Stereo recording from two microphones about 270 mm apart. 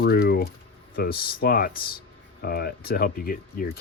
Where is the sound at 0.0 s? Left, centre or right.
Left.